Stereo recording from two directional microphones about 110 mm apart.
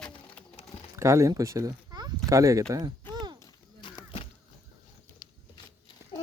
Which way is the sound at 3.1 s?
40° right (ahead or behind).